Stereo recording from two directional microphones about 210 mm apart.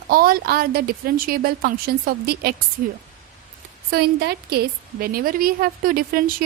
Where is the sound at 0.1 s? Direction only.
45° right (ahead or behind).